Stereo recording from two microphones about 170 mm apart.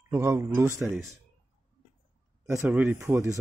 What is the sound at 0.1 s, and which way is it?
Speech, 15° right (ahead or behind).